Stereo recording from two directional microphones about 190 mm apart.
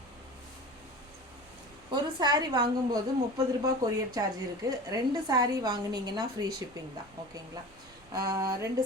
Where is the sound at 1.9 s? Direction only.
20° right (ahead or behind).